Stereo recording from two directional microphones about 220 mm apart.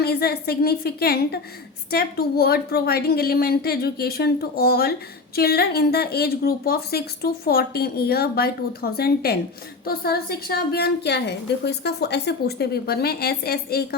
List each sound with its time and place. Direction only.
0.0 s a woman's voice: 45° left (ahead or behind)